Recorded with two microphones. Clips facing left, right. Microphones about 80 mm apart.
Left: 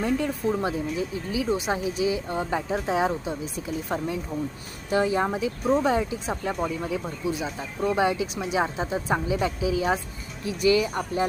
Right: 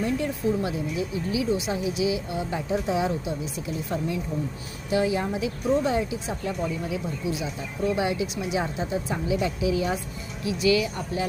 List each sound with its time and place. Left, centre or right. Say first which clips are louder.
0.6 s speech: left 1 dB; left